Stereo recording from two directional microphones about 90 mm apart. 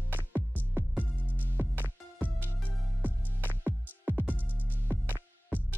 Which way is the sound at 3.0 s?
20° right (ahead or behind).